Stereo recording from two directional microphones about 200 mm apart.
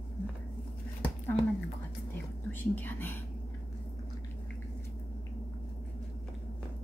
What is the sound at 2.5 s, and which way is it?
Speech, 10° left (ahead or behind).